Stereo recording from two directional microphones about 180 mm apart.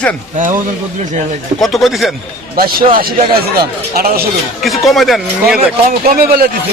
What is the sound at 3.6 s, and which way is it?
Speech, 55° right (ahead or behind).